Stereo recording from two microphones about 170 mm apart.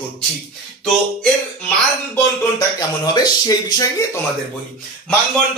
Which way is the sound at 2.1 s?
20° left (ahead or behind).